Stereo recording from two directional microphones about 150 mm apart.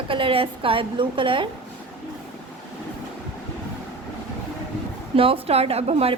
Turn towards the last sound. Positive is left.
turn(degrees=-45)  # may be behind; listen again after turning